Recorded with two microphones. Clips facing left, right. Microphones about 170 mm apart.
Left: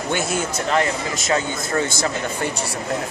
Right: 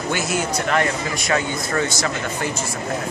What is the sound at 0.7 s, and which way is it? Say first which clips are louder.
Speech: left 2 dB; 20° left (ahead or behind).